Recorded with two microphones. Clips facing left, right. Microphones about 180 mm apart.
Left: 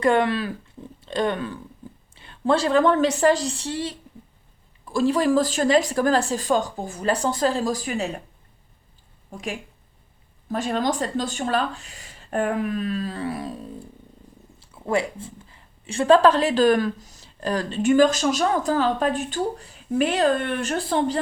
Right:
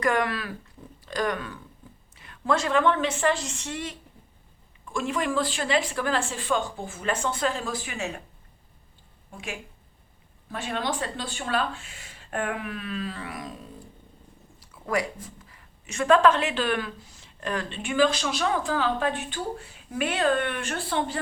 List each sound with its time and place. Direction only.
0.0 s speech: 30° left (ahead or behind)
9.3 s speech: 40° left (ahead or behind)